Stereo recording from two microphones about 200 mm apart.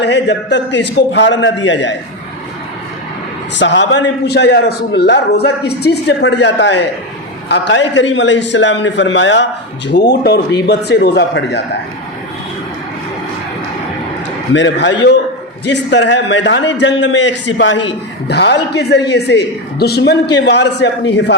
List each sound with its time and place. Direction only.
0.0 s a man's voice: 60° left (ahead or behind)
3.6 s a man's voice: 65° left (ahead or behind)
14.5 s a man's voice: 65° left (ahead or behind)